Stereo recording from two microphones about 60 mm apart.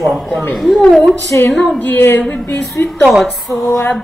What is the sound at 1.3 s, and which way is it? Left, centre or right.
Speech, left.